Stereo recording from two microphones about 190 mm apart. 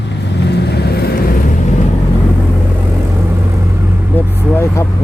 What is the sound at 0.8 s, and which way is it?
Vehicle, 55° left (ahead or behind).